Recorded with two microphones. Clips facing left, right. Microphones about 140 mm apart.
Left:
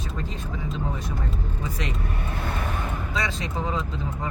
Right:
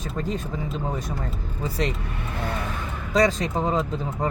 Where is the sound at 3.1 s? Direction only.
40° right (ahead or behind).